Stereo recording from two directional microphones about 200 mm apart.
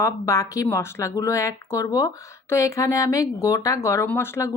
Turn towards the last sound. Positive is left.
turn(degrees=15)  # may be behind; listen again after turning